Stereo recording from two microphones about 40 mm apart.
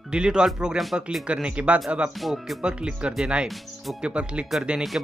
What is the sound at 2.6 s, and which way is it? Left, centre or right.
Speech, right.